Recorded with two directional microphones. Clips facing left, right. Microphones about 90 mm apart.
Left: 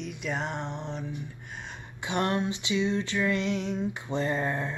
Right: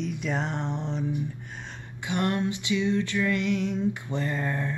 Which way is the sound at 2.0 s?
25° left (ahead or behind).